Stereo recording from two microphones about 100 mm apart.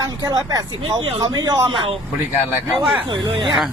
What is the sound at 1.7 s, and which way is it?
Speech, 60° right (ahead or behind).